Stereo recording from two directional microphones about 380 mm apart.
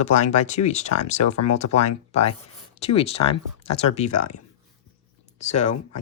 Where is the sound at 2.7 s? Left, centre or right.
Centre.